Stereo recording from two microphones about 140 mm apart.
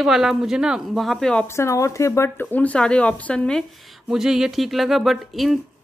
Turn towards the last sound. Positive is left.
turn(degrees=0)  # may be behind; listen again after turning